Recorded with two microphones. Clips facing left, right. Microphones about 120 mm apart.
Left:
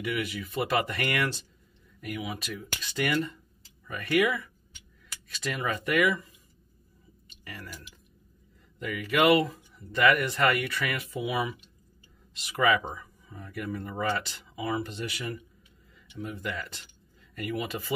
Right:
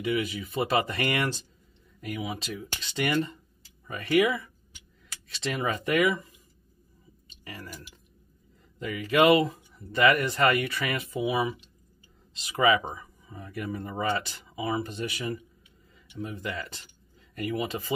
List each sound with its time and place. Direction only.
0.0 s speech: 25° right (ahead or behind)
8.7 s speech: 25° right (ahead or behind)
12.5 s speech: 20° right (ahead or behind)
12.9 s a sound: 15° right (ahead or behind)
13.5 s speech: 20° right (ahead or behind)